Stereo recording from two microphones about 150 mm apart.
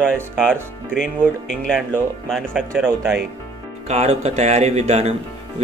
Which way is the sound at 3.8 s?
45° right (ahead or behind).